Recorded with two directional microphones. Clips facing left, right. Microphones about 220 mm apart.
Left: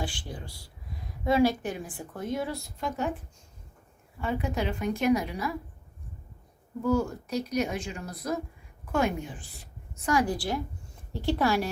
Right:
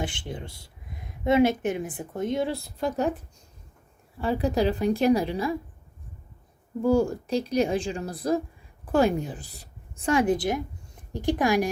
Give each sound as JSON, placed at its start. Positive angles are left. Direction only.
{"t": 0.0, "sound": "speech", "side_deg": -20}
{"t": 4.2, "sound": "a woman's voice", "side_deg": -35}
{"t": 6.8, "sound": "a woman's voice", "side_deg": -30}